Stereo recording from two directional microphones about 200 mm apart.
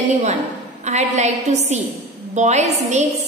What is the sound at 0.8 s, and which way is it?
A woman's voice, 35° right (ahead or behind).